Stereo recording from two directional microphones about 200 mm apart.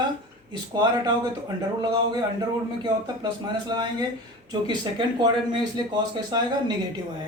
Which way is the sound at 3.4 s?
20° right (ahead or behind).